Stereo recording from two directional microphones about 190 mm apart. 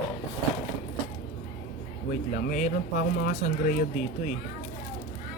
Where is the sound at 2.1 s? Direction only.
40° left (ahead or behind).